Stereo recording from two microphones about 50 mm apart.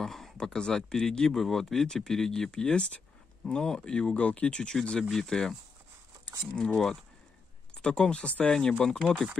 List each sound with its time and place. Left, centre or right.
0.0 s speech: centre; by 4.7 s left
5.1 s speech: centre
6.6 s speech: centre
8.5 s speech: centre